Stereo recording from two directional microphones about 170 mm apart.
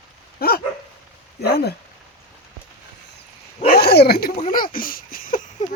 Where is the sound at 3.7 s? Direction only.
70° left (ahead or behind).